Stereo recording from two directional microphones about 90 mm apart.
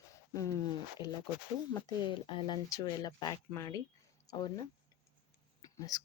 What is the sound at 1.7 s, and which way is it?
Speech, 65° left (ahead or behind).